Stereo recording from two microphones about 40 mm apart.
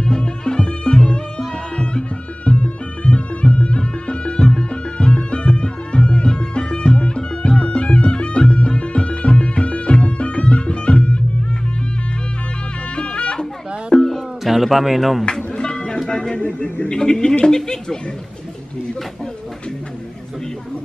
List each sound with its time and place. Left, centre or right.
0.0 s music: left
12.9 s music: left
13.9 s music: centre
14.4 s speech: centre
15.3 s music: centre
16.3 s speech: left
16.9 s a woman's voice: centre